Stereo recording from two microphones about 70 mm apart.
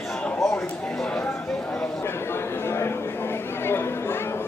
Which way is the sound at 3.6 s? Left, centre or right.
Left.